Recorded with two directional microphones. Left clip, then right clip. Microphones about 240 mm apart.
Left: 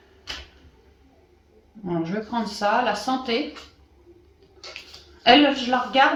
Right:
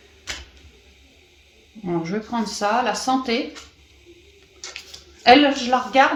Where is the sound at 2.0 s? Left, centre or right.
Right.